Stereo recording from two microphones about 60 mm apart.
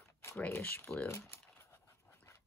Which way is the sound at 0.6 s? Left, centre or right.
Left.